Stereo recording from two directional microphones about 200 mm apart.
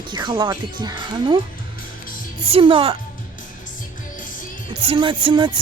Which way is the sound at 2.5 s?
25° right (ahead or behind).